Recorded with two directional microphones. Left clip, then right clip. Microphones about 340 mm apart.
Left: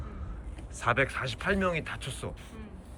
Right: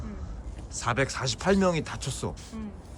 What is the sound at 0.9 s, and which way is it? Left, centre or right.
Speech, centre.